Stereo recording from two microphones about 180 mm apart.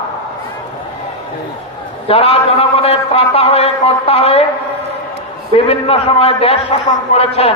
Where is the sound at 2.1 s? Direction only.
35° left (ahead or behind).